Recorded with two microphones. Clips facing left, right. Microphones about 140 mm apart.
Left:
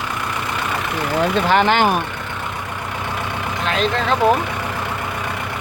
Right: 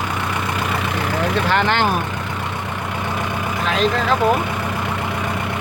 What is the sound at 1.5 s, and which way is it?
Speech, 15° left (ahead or behind).